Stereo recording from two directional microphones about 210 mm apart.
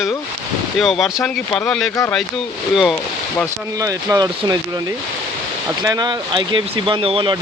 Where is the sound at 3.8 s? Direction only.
15° right (ahead or behind).